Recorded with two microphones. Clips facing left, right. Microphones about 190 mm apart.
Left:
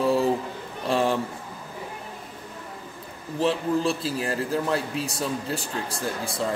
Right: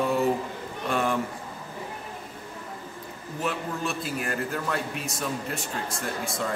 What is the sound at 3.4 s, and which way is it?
A man's voice, 30° left (ahead or behind).